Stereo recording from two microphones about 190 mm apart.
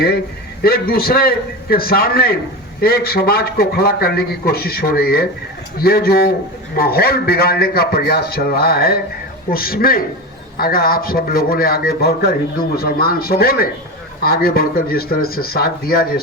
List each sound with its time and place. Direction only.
0.6 s a man's voice: 55° left (ahead or behind)